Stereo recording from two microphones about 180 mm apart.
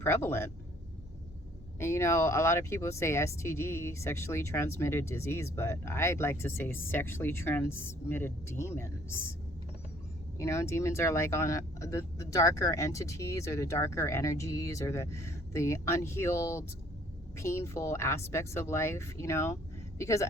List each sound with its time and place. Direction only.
0.0 s speech: 15° left (ahead or behind)
1.8 s speech: 15° left (ahead or behind)
10.3 s speech: 15° left (ahead or behind)